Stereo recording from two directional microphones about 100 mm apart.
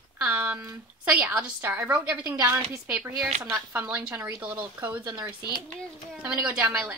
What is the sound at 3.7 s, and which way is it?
Speech, 15° right (ahead or behind).